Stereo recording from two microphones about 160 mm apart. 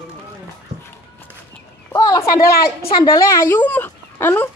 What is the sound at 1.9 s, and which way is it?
A woman's voice, 20° left (ahead or behind).